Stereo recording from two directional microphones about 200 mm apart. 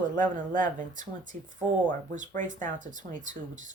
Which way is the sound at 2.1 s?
40° right (ahead or behind).